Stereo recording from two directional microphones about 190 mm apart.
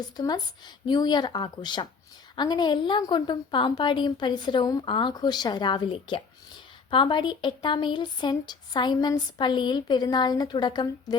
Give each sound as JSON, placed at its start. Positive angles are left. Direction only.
{"t": 0.0, "sound": "speech", "side_deg": 20}